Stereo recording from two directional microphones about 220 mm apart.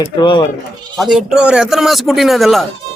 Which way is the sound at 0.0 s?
20° left (ahead or behind).